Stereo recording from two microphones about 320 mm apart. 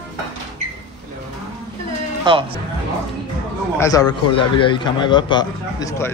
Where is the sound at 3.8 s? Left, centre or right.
Centre.